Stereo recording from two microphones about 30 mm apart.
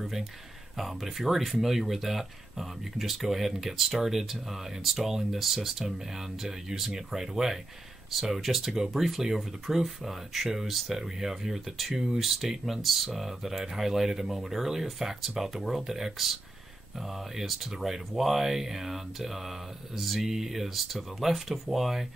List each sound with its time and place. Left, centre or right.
0.7 s speech: centre; by 12.2 s right
12.2 s speech: centre
12.4 s speech: centre
12.8 s speech: centre
20.2 s speech: centre